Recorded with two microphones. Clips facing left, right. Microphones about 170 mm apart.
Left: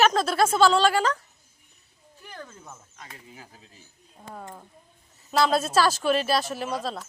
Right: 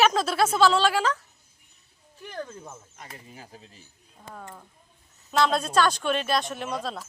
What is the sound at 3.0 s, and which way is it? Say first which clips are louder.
Speech: right 1 dB; 40° right (ahead or behind).